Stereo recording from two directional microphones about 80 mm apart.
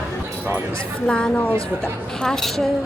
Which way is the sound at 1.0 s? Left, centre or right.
Centre.